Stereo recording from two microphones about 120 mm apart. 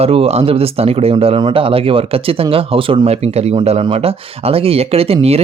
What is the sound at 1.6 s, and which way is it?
Speech, 50° right (ahead or behind).